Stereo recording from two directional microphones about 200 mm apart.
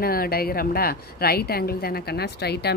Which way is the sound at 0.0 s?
50° left (ahead or behind).